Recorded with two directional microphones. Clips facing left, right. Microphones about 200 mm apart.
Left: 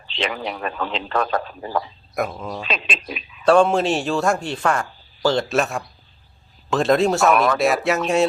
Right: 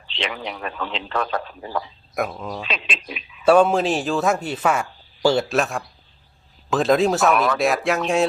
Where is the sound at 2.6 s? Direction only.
40° left (ahead or behind).